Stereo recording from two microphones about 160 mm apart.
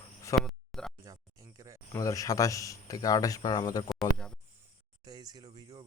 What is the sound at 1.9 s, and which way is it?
Speech, 20° left (ahead or behind).